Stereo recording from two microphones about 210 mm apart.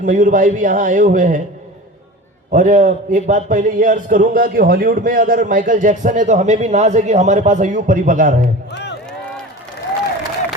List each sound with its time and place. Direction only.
0.0 s a man's voice: 35° right (ahead or behind)
2.5 s a man's voice: 35° right (ahead or behind)